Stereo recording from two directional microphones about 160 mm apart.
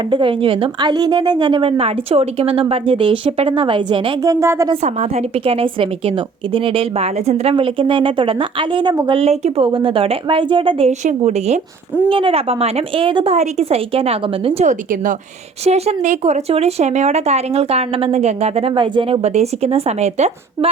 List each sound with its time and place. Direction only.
0.1 s a woman's voice: 30° right (ahead or behind)
4.7 s a woman's voice: 40° right (ahead or behind)
13.3 s a woman's voice: 45° right (ahead or behind)